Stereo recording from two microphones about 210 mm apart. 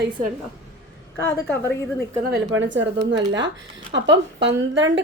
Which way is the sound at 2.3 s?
60° right (ahead or behind).